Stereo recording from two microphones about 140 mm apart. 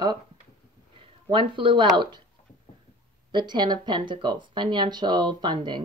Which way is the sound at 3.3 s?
30° right (ahead or behind).